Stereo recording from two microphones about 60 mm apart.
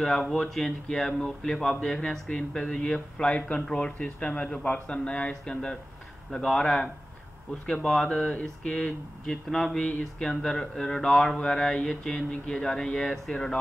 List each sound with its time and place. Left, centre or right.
0.0 s speech: centre
9.8 s a sound: centre
10.2 s speech: centre